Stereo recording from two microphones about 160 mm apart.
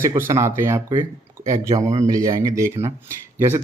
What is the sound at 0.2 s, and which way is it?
Speech, 15° right (ahead or behind).